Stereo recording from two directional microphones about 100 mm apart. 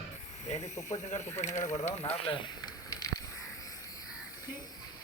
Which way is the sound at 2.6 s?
40° left (ahead or behind).